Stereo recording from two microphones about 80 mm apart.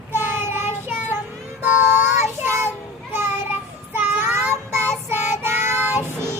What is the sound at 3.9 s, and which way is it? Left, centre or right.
Child singing, right.